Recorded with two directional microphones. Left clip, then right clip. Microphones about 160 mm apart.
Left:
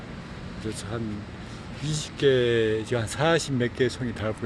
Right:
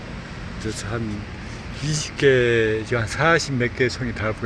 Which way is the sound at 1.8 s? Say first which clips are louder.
Right 5 dB; 5° left (ahead or behind).